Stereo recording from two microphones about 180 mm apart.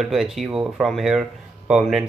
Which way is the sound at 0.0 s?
Centre (ahead or behind).